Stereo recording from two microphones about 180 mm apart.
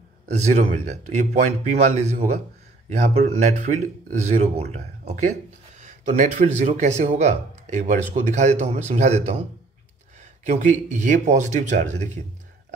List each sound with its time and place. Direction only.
0.3 s speech: 40° right (ahead or behind)